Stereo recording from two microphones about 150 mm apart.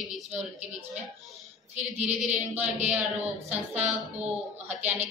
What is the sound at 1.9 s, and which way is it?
Female singing, 45° right (ahead or behind).